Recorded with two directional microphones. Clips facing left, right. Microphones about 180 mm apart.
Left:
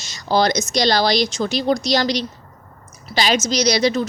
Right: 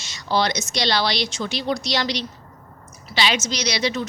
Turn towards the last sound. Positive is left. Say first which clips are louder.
# left 7 dB
turn(degrees=40)  # may be behind; listen again after turning